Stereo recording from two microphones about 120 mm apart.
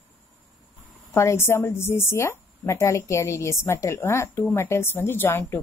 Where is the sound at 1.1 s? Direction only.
20° left (ahead or behind).